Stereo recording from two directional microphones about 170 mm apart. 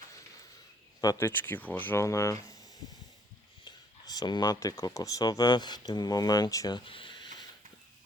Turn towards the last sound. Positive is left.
turn(degrees=30)  # may be behind; listen again after turning